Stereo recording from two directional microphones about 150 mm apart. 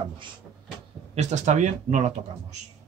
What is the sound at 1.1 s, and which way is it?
Speech, 50° right (ahead or behind).